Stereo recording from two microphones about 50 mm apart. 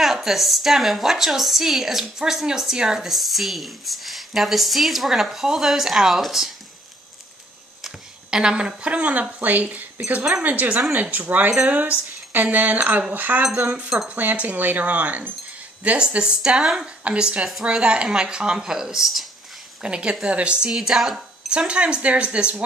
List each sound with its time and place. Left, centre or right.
0.0 s a woman's voice: centre
7.8 s a woman's voice: centre
19.8 s speech: centre
20.7 s a woman's voice: centre
21.5 s speech: right